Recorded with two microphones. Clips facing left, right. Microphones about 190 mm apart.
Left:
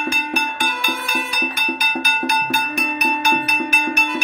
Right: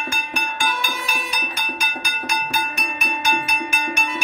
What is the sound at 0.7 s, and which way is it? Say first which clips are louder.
Music: left 1 dB; 55° left (ahead or behind).